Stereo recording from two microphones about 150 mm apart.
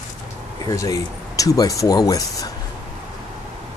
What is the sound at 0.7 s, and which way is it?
Speech, 25° left (ahead or behind).